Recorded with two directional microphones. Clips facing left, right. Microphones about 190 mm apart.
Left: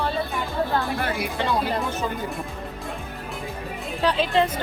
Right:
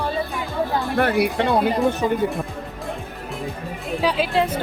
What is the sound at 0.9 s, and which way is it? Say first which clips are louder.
Speech: right 7 dB; 65° right (ahead or behind).